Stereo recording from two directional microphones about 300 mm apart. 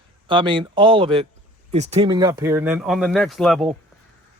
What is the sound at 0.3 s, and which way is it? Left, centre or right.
Speech, centre.